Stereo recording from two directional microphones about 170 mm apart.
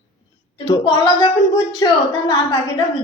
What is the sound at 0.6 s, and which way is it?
Speech, 25° left (ahead or behind).